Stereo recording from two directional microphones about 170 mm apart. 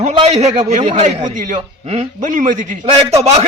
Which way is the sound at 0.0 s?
40° right (ahead or behind).